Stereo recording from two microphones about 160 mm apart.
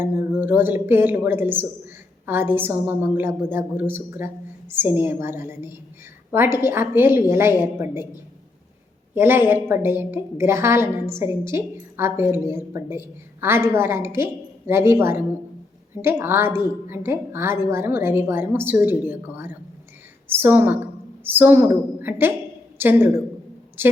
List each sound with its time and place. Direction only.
0.0 s a woman's voice: 15° right (ahead or behind)